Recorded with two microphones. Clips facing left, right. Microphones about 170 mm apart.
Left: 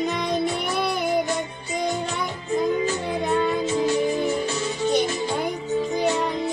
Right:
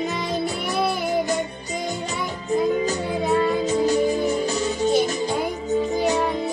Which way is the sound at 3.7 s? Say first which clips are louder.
Right 2 dB; 40° right (ahead or behind).